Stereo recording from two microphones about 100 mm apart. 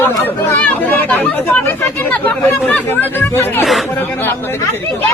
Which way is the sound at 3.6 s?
Centre (ahead or behind).